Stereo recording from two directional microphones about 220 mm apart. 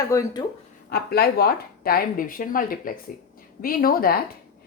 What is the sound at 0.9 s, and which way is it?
A woman's voice, 45° left (ahead or behind).